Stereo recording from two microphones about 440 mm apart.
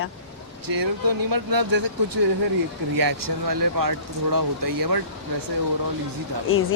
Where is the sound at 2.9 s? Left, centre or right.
Right.